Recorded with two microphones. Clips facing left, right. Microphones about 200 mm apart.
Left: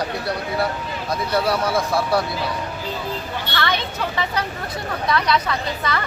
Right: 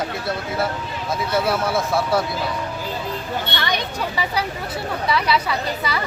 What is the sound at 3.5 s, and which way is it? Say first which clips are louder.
A woman's voice: left 5 dB; 15° right (ahead or behind).